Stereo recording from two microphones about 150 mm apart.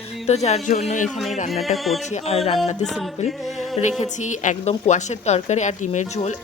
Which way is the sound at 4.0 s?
55° left (ahead or behind).